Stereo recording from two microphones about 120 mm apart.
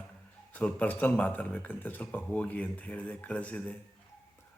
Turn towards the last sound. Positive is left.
turn(degrees=10)  # may be behind; listen again after turning